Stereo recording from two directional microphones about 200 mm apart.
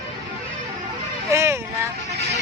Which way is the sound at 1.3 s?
15° right (ahead or behind).